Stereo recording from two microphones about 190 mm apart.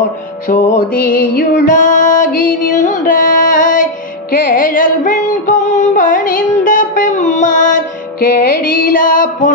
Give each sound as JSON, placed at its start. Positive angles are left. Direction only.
{"t": 0.5, "sound": "music", "side_deg": 45}